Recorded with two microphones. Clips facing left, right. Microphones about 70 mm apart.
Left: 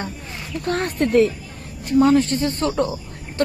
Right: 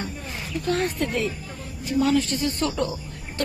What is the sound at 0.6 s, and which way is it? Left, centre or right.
A woman's voice, left.